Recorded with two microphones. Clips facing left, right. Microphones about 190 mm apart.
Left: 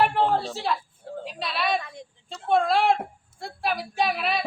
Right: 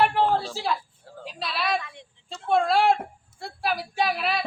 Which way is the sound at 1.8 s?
40° left (ahead or behind).